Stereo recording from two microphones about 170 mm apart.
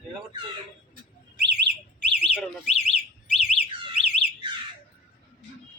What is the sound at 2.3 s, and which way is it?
Alarm, 5° right (ahead or behind).